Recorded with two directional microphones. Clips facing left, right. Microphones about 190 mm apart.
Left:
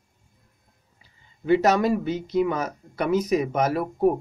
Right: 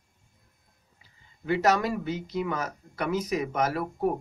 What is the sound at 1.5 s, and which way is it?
Speech, 25° left (ahead or behind).